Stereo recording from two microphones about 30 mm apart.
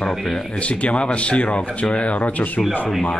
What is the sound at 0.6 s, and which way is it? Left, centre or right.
Speech, left.